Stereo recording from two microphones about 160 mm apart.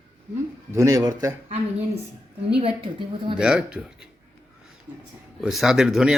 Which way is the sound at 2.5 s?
35° right (ahead or behind).